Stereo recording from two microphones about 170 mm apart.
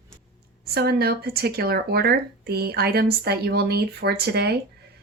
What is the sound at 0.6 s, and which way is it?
Speech, 65° right (ahead or behind).